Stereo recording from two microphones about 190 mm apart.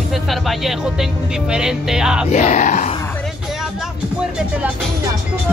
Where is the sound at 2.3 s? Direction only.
35° left (ahead or behind).